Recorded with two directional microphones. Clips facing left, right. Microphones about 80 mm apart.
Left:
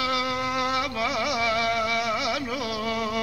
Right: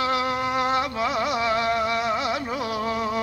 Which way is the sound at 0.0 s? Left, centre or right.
Right.